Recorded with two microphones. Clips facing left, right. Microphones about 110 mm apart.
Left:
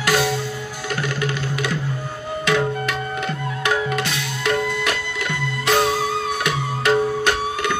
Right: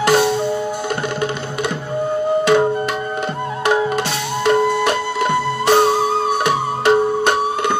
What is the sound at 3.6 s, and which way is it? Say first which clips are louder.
Music: right 5 dB; 30° right (ahead or behind).